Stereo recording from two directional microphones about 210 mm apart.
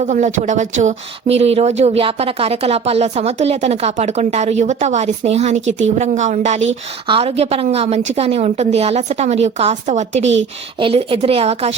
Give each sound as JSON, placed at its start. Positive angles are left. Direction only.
{"t": 0.0, "sound": "a woman's voice", "side_deg": -35}